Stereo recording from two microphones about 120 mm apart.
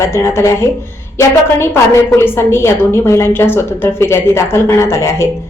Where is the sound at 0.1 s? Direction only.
20° left (ahead or behind).